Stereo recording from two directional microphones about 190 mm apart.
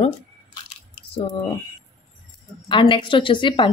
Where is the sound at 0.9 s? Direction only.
30° left (ahead or behind).